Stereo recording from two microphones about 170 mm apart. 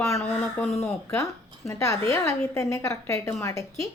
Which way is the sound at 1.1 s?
15° left (ahead or behind).